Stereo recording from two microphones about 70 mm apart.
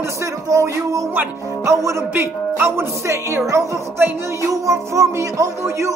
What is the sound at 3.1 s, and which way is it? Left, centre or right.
Speech, right.